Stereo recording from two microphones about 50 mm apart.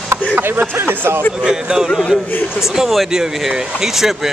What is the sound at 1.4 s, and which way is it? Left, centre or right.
Speech, centre.